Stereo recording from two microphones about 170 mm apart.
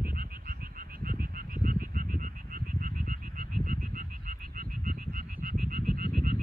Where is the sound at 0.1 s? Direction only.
55° right (ahead or behind).